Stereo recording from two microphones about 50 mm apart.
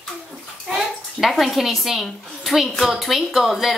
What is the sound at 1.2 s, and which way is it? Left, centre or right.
A woman's voice, centre.